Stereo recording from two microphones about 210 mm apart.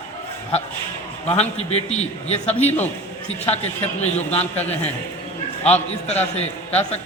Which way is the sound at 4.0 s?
30° left (ahead or behind).